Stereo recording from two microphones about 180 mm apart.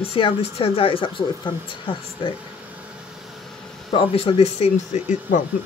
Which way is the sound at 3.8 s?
30° left (ahead or behind).